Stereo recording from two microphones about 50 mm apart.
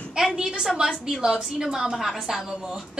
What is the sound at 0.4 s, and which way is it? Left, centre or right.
A woman's voice, centre.